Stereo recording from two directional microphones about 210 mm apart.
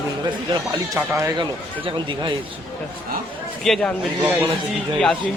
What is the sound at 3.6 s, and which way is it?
Speech, centre (ahead or behind).